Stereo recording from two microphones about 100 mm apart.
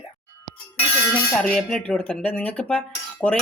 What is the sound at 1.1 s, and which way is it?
Speech, 10° left (ahead or behind).